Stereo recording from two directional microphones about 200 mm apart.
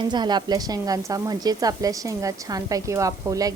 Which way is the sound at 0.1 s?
20° right (ahead or behind).